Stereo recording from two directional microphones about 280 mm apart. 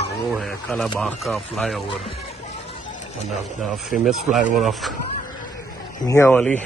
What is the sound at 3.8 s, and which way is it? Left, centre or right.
Speech, centre.